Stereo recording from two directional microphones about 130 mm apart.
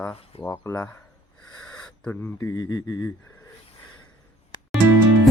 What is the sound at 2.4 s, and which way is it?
Speech, 25° left (ahead or behind).